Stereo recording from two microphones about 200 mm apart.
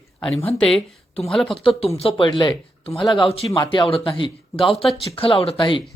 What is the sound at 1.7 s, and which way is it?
A woman's voice, 30° left (ahead or behind).